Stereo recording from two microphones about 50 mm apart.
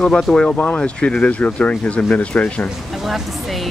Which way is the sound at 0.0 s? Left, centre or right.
Centre.